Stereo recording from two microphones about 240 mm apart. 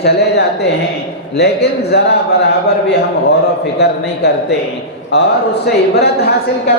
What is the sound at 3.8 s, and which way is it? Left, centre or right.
Speech, left.